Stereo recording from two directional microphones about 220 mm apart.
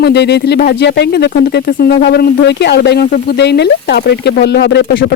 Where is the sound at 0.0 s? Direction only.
50° left (ahead or behind).